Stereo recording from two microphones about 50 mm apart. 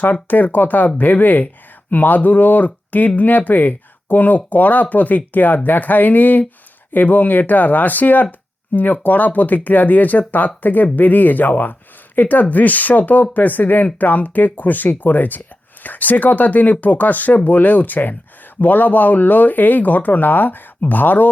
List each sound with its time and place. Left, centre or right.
0.0 s speech: left